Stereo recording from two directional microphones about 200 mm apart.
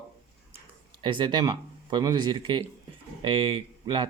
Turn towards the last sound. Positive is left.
turn(degrees=-20)  # may be behind; listen again after turning